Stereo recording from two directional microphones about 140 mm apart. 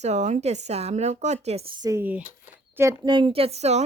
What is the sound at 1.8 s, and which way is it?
Speech, 15° right (ahead or behind).